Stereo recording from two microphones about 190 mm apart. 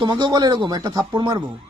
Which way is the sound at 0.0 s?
25° right (ahead or behind).